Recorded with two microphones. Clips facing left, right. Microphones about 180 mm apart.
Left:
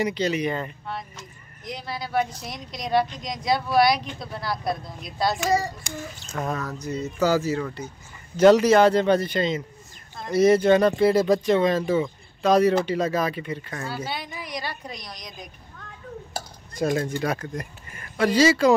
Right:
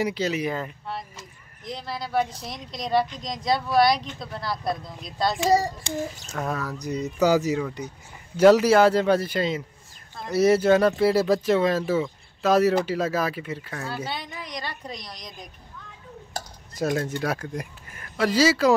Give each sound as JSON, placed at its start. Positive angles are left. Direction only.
{"t": 0.0, "sound": "speech", "side_deg": -5}
{"t": 5.4, "sound": "child singing", "side_deg": -30}
{"t": 6.3, "sound": "speech", "side_deg": 0}
{"t": 8.4, "sound": "speech", "side_deg": -5}
{"t": 16.7, "sound": "speech", "side_deg": 0}